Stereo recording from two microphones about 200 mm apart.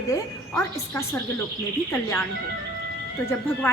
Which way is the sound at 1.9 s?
10° left (ahead or behind).